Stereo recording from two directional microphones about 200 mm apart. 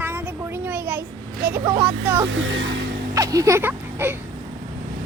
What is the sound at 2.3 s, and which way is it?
Speech, 70° right (ahead or behind).